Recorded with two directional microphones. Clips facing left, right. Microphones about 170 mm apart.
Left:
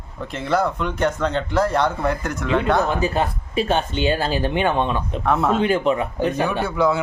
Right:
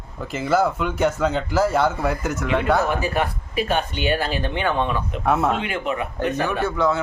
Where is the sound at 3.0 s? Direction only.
25° left (ahead or behind).